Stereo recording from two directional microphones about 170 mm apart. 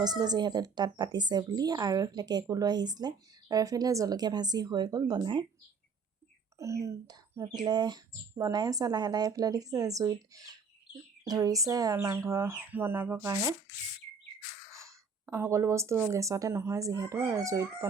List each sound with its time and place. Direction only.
0.0 s speech: 25° right (ahead or behind)
6.6 s speech: 15° right (ahead or behind)
14.8 s speech: 15° right (ahead or behind)